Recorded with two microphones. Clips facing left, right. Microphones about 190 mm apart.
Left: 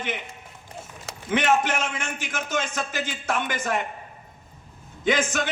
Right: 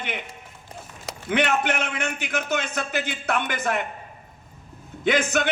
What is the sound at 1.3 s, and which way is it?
Speech, 60° right (ahead or behind).